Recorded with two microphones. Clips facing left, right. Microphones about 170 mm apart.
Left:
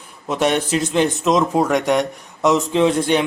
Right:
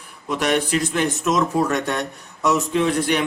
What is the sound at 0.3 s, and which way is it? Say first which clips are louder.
A man's voice: left 2 dB; 25° left (ahead or behind).